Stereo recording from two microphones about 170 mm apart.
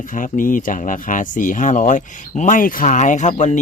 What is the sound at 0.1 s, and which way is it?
Speech, 50° left (ahead or behind).